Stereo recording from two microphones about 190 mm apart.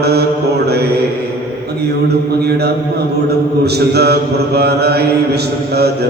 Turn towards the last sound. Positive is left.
turn(degrees=-60)  # may be behind; listen again after turning